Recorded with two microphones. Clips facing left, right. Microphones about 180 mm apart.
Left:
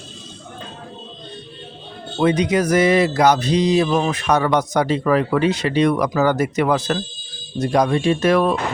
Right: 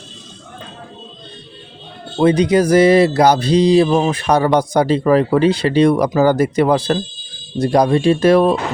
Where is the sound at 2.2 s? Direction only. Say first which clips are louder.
Right 4 dB; 30° right (ahead or behind).